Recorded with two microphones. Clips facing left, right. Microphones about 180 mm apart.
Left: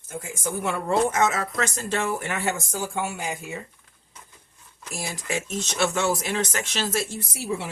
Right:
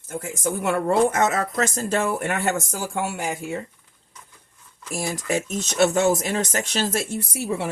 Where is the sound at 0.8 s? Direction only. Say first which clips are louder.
Right 2 dB; 50° right (ahead or behind).